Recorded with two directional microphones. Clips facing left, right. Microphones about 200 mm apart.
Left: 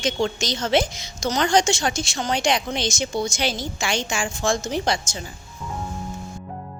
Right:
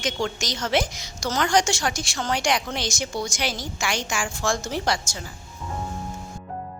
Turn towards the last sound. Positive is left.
turn(degrees=20)  # may be behind; listen again after turning